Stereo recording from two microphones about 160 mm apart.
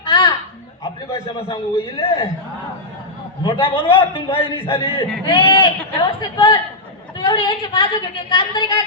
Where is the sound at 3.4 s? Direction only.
30° left (ahead or behind).